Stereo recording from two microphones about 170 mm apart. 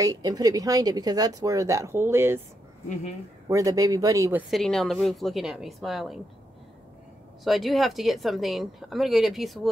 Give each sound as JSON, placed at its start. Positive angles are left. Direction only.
{"t": 0.0, "sound": "speech", "side_deg": -20}
{"t": 3.4, "sound": "speech", "side_deg": -20}
{"t": 4.5, "sound": "speech", "side_deg": 0}
{"t": 7.4, "sound": "speech", "side_deg": 0}